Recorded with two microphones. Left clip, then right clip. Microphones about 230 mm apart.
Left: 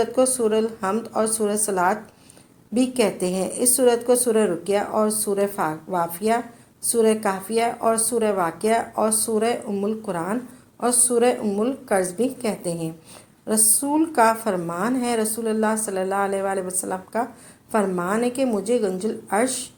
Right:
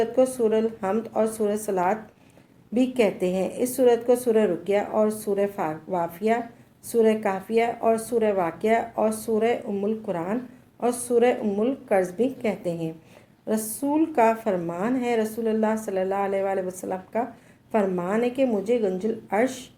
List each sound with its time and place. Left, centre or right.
0.0 s speech: left